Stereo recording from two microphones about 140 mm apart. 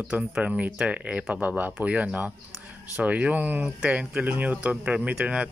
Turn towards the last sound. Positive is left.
turn(degrees=-5)  # may be behind; listen again after turning